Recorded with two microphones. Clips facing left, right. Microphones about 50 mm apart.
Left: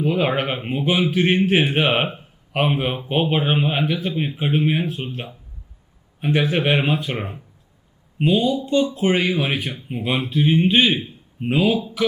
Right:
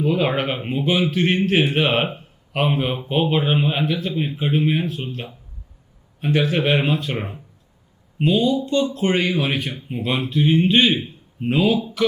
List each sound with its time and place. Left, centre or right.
0.0 s speech: centre
7.2 s speech: centre